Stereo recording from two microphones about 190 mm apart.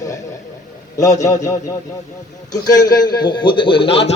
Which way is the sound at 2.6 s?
20° left (ahead or behind).